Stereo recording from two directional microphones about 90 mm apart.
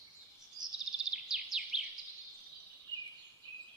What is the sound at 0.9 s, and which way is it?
Bird vocalization, 5° right (ahead or behind).